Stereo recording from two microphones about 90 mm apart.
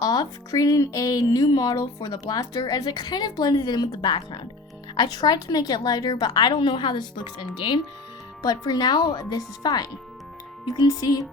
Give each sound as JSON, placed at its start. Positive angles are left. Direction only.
{"t": 0.0, "sound": "speech", "side_deg": 50}
{"t": 8.4, "sound": "speech", "side_deg": 50}